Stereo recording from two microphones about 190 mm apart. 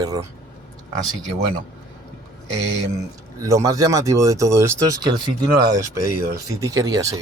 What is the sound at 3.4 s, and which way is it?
Speech, 15° right (ahead or behind).